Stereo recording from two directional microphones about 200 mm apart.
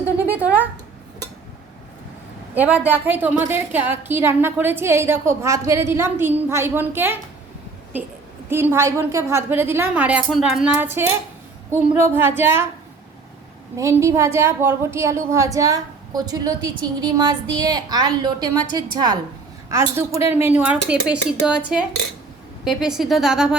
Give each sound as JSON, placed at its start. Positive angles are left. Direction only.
{"t": 0.0, "sound": "a sound", "side_deg": -10}
{"t": 2.6, "sound": "a woman's voice", "side_deg": -10}
{"t": 8.4, "sound": "a woman's voice", "side_deg": -10}
{"t": 13.7, "sound": "a woman's voice", "side_deg": -15}